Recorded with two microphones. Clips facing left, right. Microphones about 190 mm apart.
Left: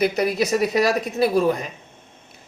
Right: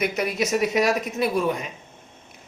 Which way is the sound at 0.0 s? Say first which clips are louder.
Left 4 dB; 35° left (ahead or behind).